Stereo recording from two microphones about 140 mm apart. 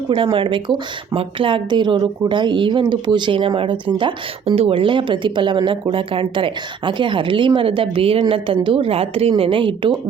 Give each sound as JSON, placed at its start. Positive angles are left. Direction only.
{"t": 0.1, "sound": "a woman's voice", "side_deg": -35}